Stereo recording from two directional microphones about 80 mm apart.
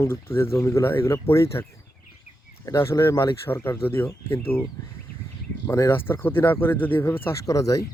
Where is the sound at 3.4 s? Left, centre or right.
Left.